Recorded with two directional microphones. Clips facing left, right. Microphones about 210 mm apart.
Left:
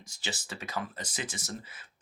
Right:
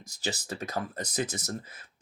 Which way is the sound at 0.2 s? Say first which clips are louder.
Right 5 dB; 40° right (ahead or behind).